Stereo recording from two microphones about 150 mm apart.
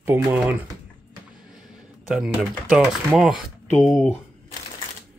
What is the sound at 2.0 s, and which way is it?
Speech, 5° right (ahead or behind).